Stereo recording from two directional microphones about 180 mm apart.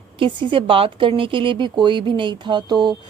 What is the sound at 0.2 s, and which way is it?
A woman's voice, 25° right (ahead or behind).